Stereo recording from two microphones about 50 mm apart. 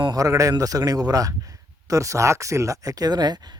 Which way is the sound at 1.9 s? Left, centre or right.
Right.